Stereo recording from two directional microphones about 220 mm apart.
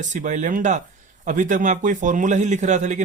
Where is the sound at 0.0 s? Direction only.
35° right (ahead or behind).